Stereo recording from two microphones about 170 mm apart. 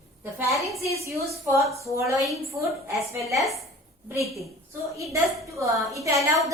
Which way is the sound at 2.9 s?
15° right (ahead or behind).